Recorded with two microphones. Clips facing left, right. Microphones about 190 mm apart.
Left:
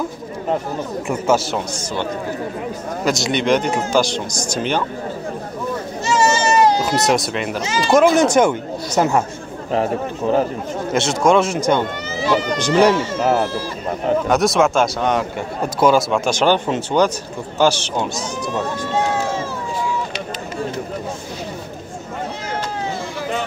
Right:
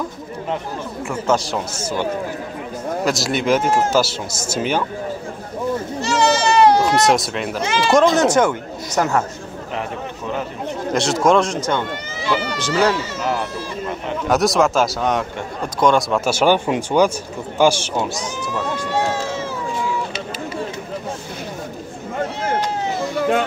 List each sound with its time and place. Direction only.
1.2 s speech: 5° left (ahead or behind)
3.1 s speech: centre (ahead or behind)
6.0 s goat: 65° right (ahead or behind)
6.8 s speech: centre (ahead or behind)
8.2 s speech: 15° left (ahead or behind)
9.7 s speech: 35° left (ahead or behind)
10.9 s speech: centre (ahead or behind)
13.2 s a sound: 40° left (ahead or behind)
14.3 s speech: centre (ahead or behind)
16.3 s speech: 10° right (ahead or behind)